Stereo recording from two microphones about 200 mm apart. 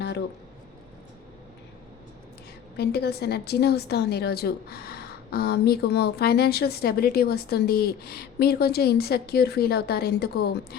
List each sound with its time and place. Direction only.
2.7 s a woman's voice: 55° left (ahead or behind)